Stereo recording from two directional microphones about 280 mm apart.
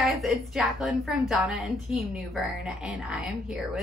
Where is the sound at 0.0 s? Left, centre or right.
Centre.